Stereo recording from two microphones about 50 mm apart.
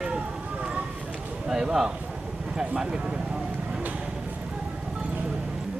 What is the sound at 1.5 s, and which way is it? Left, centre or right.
Speech, centre.